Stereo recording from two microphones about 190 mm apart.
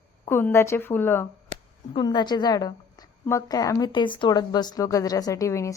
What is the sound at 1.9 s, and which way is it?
A woman's voice, 25° left (ahead or behind).